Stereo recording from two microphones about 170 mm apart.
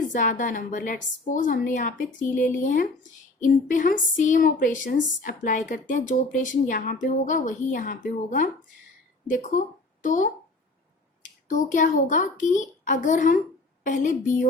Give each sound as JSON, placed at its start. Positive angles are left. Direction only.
{"t": 0.1, "sound": "a woman's voice", "side_deg": 50}